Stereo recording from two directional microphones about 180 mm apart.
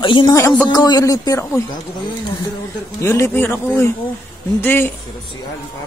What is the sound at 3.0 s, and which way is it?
A man's voice, 15° left (ahead or behind).